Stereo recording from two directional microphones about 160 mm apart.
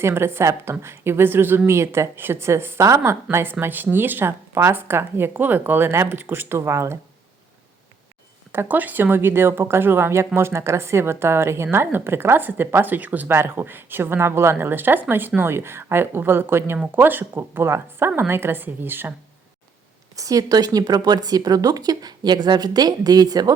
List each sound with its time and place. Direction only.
0.0 s speech: 15° right (ahead or behind)
8.5 s speech: 10° right (ahead or behind)
20.1 s speech: 20° right (ahead or behind)